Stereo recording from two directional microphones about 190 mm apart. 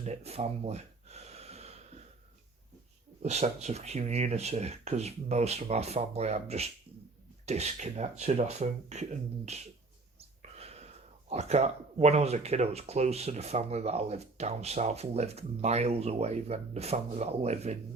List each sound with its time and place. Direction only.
0.0 s gasp: 35° right (ahead or behind)
3.2 s speech: 35° right (ahead or behind)
10.2 s a sound: 35° right (ahead or behind)
11.3 s speech: 35° right (ahead or behind)